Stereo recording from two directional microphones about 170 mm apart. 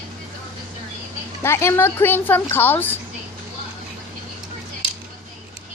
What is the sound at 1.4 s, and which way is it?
Speech, 15° left (ahead or behind).